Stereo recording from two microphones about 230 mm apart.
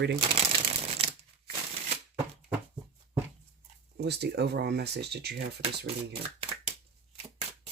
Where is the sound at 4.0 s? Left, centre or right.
Right.